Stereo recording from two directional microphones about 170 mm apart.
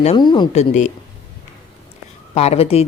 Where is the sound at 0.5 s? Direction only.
45° left (ahead or behind).